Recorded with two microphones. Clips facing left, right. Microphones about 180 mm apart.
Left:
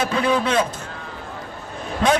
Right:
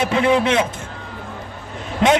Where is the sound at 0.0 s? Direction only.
20° right (ahead or behind).